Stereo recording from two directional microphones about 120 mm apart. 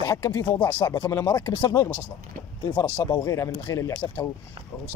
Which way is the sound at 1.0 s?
25° left (ahead or behind).